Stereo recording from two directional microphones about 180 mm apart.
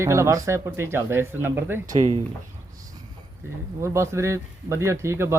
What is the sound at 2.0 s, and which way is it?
Speech, 40° right (ahead or behind).